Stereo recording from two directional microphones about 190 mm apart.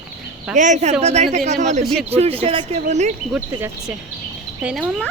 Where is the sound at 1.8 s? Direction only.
Centre (ahead or behind).